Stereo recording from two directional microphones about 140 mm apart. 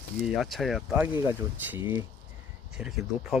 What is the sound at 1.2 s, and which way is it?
Speech, 15° right (ahead or behind).